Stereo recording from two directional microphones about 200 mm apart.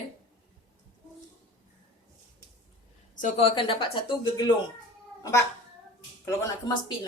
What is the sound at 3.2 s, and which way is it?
A woman's voice, 35° left (ahead or behind).